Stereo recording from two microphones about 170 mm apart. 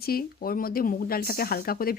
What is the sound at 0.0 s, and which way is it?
Speech, 60° left (ahead or behind).